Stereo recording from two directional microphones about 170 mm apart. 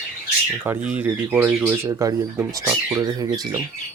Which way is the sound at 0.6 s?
10° right (ahead or behind).